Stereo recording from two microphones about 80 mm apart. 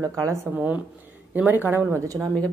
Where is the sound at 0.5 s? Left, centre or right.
Right.